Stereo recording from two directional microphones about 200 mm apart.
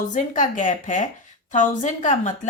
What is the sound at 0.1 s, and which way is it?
A woman's voice, 40° left (ahead or behind).